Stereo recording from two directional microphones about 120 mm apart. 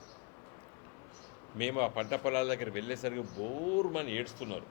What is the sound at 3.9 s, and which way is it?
Speech, 20° left (ahead or behind).